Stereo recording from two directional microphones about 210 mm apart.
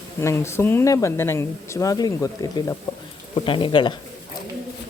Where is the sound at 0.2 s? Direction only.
15° left (ahead or behind).